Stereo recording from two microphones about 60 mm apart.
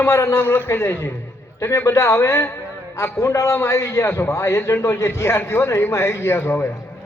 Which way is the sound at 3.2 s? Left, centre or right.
Left.